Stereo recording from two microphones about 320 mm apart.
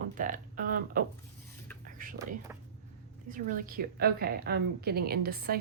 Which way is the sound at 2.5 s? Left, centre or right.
Centre.